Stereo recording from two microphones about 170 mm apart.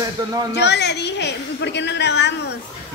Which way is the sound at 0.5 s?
85° left.